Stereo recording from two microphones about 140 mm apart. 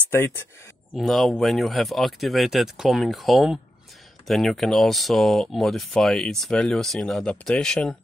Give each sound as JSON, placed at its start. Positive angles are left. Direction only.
{"t": 0.1, "sound": "speech", "side_deg": 15}
{"t": 0.9, "sound": "speech", "side_deg": 0}